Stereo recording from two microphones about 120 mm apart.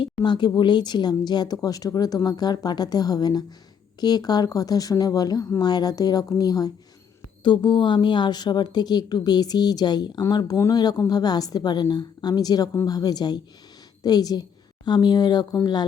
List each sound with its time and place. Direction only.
0.2 s speech: 40° left (ahead or behind)